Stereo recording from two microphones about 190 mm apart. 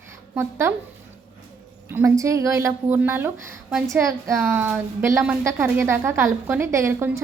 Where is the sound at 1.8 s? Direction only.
15° right (ahead or behind).